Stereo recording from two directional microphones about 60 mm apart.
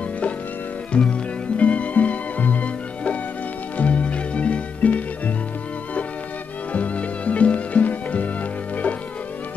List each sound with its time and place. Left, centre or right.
0.9 s music: centre
6.7 s music: left